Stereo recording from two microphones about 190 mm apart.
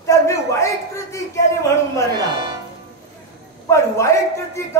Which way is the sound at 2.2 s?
20° right (ahead or behind).